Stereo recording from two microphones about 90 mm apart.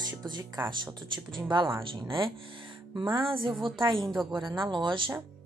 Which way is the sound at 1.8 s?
70° right (ahead or behind).